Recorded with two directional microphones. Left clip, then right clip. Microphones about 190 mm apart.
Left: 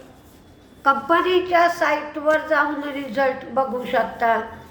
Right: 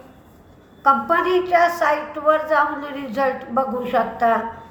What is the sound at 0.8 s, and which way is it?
A woman's voice, 10° left (ahead or behind).